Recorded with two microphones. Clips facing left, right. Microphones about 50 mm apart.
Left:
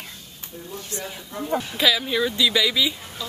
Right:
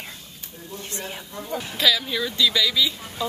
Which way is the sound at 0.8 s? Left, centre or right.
Right.